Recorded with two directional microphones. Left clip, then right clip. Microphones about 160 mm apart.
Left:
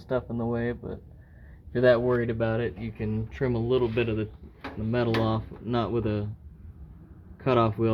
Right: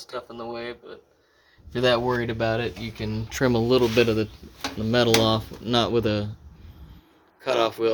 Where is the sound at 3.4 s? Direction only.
35° right (ahead or behind); by 6.3 s 20° right (ahead or behind).